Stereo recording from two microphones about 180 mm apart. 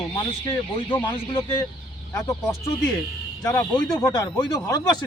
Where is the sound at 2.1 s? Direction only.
15° left (ahead or behind).